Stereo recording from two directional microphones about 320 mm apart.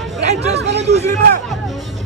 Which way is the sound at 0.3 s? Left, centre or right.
Centre.